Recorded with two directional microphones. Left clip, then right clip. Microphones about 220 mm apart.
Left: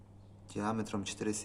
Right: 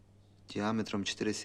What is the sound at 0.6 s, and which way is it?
Speech, 45° right (ahead or behind).